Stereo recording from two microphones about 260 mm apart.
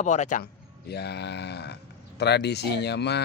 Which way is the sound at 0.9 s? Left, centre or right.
Left.